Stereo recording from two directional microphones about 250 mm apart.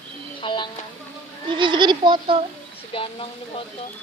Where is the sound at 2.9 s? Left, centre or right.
Left.